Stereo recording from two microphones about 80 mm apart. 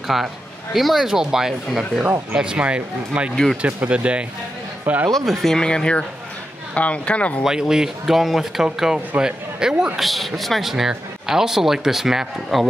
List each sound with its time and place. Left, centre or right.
0.1 s a man's voice: centre
5.1 s a man's voice: centre
5.6 s speech: centre
7.4 s a man's voice: centre